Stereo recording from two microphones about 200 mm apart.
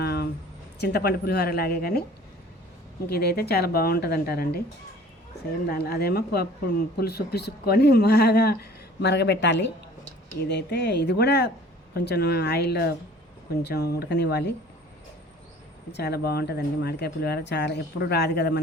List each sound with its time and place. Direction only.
0.0 s a sound: 55° left (ahead or behind)
0.8 s speech: 55° left (ahead or behind)
3.1 s speech: 55° left (ahead or behind)
5.6 s speech: 50° left (ahead or behind)
15.9 s speech: 55° left (ahead or behind)